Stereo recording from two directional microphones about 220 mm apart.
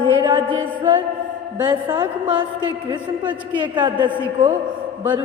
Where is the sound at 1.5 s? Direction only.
20° right (ahead or behind).